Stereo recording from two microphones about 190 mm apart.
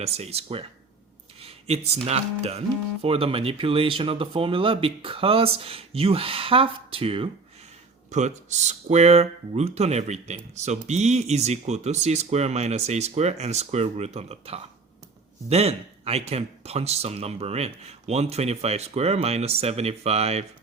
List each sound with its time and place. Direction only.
0.0 s speech: 35° right (ahead or behind)
1.4 s a sound: 35° right (ahead or behind)
2.0 s speech: 35° right (ahead or behind)